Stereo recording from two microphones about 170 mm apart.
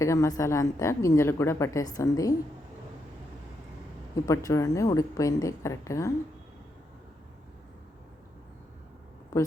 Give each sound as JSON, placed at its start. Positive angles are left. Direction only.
{"t": 0.0, "sound": "a woman's voice", "side_deg": 20}
{"t": 4.1, "sound": "a woman's voice", "side_deg": 20}